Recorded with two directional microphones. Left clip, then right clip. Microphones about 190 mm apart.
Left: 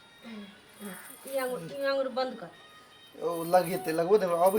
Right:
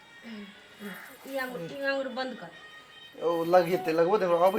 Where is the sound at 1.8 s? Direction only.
15° left (ahead or behind).